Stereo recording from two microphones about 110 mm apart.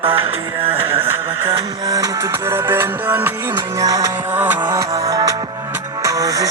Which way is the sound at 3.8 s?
30° right (ahead or behind).